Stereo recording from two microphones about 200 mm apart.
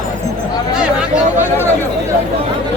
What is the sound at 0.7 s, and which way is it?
Chatter, 5° right (ahead or behind).